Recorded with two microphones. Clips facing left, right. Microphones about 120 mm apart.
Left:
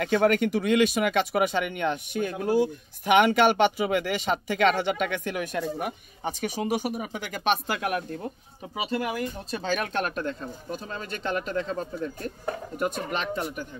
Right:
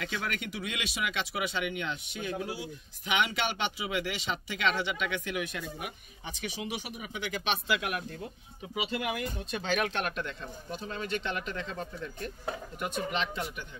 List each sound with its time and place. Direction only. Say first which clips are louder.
0.0 s speech: left 14 dB; 50° left (ahead or behind)